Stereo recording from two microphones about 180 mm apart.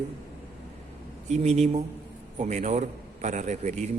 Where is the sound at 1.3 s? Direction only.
40° right (ahead or behind).